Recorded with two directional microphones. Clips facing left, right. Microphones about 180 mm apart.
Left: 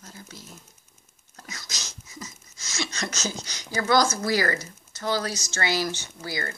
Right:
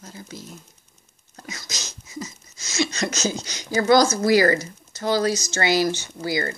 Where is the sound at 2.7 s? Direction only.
20° right (ahead or behind).